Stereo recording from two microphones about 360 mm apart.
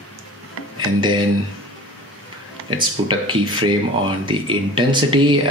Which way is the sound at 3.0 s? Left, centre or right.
Centre.